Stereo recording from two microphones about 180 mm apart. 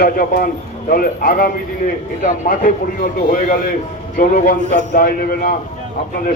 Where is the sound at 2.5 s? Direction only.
50° left (ahead or behind).